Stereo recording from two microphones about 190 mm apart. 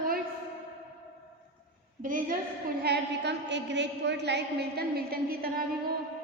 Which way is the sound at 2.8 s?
60° right (ahead or behind).